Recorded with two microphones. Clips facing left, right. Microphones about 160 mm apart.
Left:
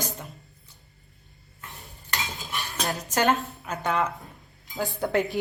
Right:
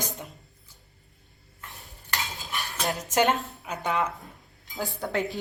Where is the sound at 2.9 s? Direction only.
20° right (ahead or behind).